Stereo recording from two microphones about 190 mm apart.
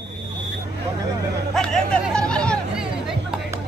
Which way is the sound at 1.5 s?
5° left (ahead or behind).